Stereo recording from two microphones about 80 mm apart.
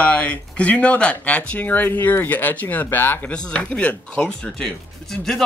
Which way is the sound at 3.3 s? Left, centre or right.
Centre.